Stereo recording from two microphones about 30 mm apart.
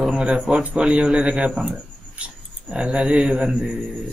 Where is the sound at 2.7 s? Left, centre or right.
Right.